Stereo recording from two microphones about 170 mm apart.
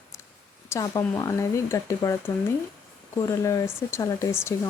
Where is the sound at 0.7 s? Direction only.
15° left (ahead or behind).